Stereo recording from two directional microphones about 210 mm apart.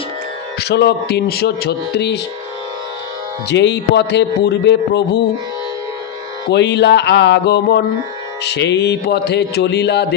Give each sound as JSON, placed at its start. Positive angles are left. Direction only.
{"t": 0.6, "sound": "speech", "side_deg": 55}
{"t": 3.4, "sound": "speech", "side_deg": 55}
{"t": 6.5, "sound": "speech", "side_deg": 55}